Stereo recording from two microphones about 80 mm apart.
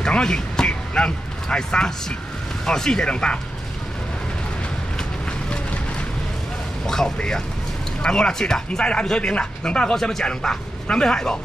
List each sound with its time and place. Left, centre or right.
0.0 s speech: centre
5.5 s boat: centre
6.9 s speech: centre